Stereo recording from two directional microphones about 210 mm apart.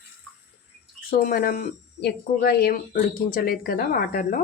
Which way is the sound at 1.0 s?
45° left (ahead or behind).